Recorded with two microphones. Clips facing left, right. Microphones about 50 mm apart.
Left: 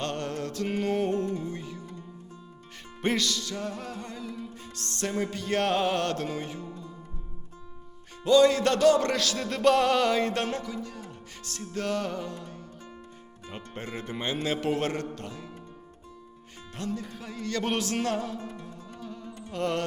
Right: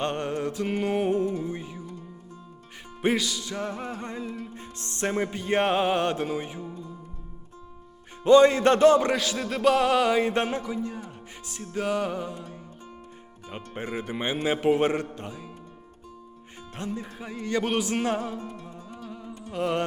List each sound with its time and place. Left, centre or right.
0.0 s music: centre
3.0 s music: centre
8.2 s music: right
9.0 s music: centre
16.7 s music: right
19.0 s music: centre